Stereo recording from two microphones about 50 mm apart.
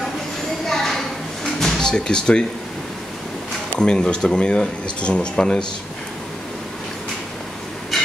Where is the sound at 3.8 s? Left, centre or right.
Centre.